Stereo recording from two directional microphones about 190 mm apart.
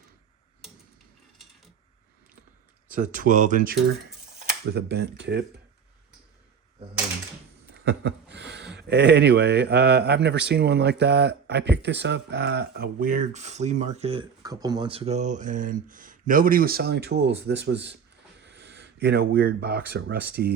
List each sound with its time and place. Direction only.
2.9 s speech: 45° right (ahead or behind); by 5.5 s 60° right (ahead or behind)
7.7 s speech: 65° right (ahead or behind); by 14.3 s 30° right (ahead or behind)
14.4 s speech: 20° right (ahead or behind); by 17.9 s 65° right (ahead or behind)
18.4 s a sound: 65° right (ahead or behind)
19.9 s speech: 55° right (ahead or behind)